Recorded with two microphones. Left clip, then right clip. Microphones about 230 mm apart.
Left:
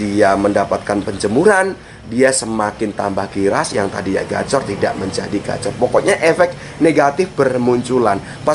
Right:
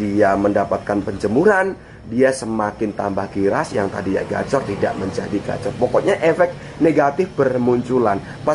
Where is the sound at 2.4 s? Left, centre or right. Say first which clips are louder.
Left 3 dB; right.